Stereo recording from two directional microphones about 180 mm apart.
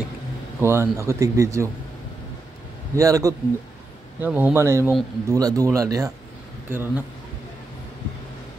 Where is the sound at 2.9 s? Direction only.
20° right (ahead or behind).